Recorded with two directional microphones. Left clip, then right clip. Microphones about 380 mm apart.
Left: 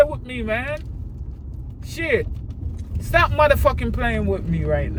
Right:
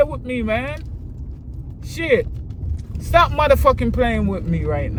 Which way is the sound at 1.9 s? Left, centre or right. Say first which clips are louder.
Right 4 dB; centre.